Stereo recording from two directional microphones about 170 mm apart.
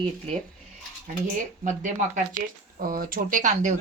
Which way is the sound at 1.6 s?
50° right (ahead or behind).